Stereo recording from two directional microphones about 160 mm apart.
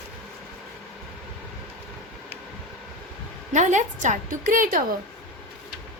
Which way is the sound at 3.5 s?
50° right (ahead or behind).